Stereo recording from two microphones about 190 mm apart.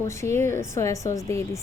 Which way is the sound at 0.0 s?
15° left (ahead or behind).